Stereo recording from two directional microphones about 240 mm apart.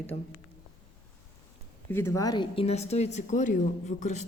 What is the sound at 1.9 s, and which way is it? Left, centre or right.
Speech, centre.